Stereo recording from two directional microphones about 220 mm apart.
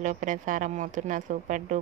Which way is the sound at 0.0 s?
35° right (ahead or behind).